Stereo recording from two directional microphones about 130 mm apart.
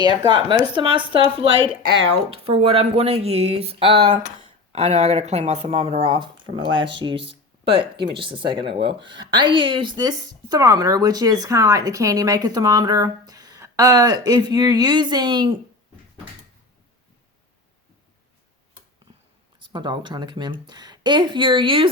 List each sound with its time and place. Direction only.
0.5 s speech: 40° right (ahead or behind)
19.7 s speech: 35° right (ahead or behind)